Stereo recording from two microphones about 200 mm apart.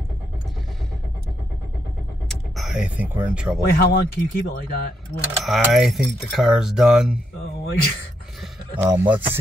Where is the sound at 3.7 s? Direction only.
50° left (ahead or behind).